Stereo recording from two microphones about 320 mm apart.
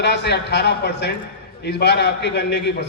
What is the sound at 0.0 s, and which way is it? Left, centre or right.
A man's voice, left.